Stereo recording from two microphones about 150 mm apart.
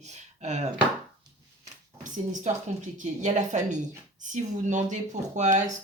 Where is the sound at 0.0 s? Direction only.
50° right (ahead or behind).